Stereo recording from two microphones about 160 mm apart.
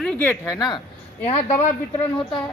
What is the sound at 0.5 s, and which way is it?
Speech, 25° left (ahead or behind).